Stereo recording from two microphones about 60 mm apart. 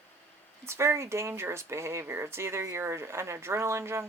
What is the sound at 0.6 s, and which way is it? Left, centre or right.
Speech, right.